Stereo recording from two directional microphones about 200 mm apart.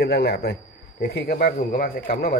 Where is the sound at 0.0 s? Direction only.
55° left (ahead or behind).